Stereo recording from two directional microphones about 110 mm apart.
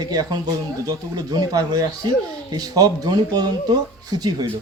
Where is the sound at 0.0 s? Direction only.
35° right (ahead or behind).